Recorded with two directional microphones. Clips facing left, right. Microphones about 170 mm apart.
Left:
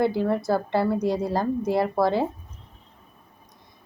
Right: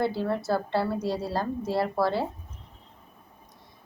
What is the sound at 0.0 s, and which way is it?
A woman's voice, 15° left (ahead or behind).